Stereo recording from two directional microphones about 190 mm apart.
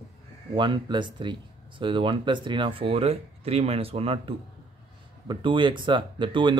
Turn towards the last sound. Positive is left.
turn(degrees=-25)  # may be behind; listen again after turning